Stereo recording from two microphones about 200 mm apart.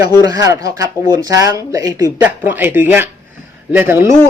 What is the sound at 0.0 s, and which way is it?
Speech, 15° right (ahead or behind).